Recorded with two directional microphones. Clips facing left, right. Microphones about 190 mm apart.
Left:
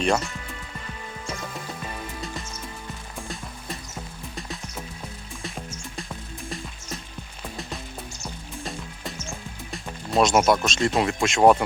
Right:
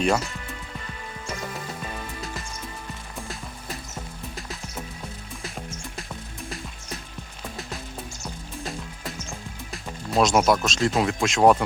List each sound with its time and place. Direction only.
0.0 s speech: centre (ahead or behind)
8.2 s music: centre (ahead or behind)
9.7 s speech: centre (ahead or behind)